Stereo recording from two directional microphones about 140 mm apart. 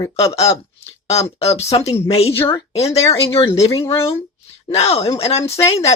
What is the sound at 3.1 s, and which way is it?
Speech, 20° left (ahead or behind).